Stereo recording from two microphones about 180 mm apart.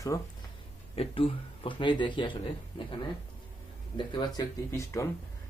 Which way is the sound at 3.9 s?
25° left (ahead or behind).